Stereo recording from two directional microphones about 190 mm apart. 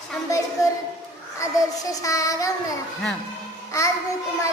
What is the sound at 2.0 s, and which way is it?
Child singing, 15° left (ahead or behind).